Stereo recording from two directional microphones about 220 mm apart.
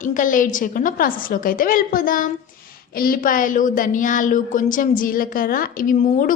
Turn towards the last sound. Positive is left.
turn(degrees=35)  # may be behind; listen again after turning